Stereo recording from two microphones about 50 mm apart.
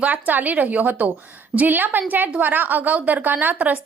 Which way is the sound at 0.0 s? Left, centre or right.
Right.